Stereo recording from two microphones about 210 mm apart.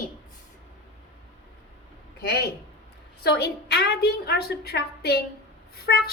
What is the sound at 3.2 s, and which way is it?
A woman's voice, 50° left (ahead or behind).